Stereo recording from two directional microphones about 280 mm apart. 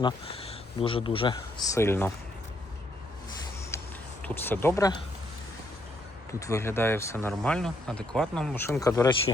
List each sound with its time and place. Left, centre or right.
0.0 s speech: left
4.2 s speech: centre
6.4 s speech: centre